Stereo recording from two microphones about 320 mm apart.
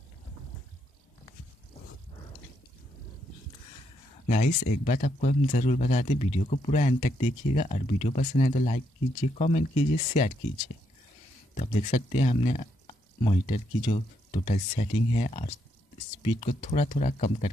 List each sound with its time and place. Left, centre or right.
4.3 s speech: left
11.5 s speech: centre